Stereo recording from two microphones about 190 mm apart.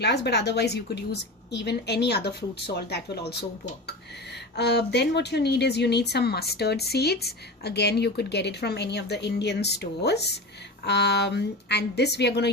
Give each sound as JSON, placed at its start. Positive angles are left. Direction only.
{"t": 0.0, "sound": "speech", "side_deg": 60}
{"t": 4.5, "sound": "speech", "side_deg": 60}